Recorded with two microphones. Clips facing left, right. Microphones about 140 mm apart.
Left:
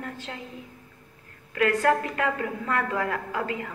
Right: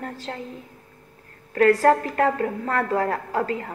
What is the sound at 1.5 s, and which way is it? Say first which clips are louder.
A woman's voice: right 6 dB; 40° right (ahead or behind).